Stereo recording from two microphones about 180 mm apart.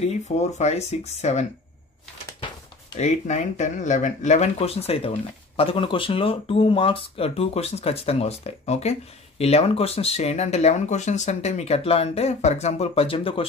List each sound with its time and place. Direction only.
0.0 s speech: 35° left (ahead or behind)
3.0 s speech: 40° left (ahead or behind)